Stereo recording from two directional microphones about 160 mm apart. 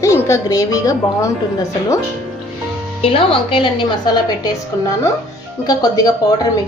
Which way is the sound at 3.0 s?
35° left (ahead or behind).